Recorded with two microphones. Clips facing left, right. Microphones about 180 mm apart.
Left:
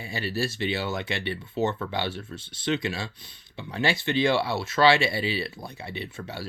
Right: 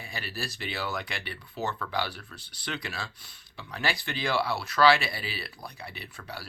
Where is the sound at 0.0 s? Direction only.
30° left (ahead or behind).